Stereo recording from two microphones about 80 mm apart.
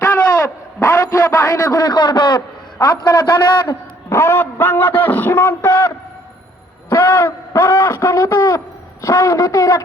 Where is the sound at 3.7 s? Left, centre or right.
Left.